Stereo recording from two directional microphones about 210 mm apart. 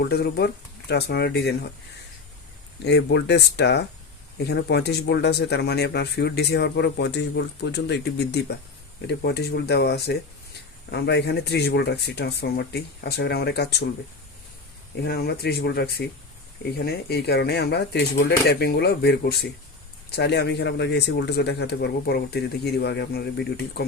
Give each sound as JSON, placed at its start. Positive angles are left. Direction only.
{"t": 0.0, "sound": "speech", "side_deg": 50}
{"t": 2.8, "sound": "speech", "side_deg": 55}
{"t": 15.0, "sound": "speech", "side_deg": 50}